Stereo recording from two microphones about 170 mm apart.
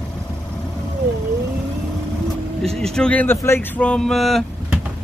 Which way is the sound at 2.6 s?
5° left (ahead or behind).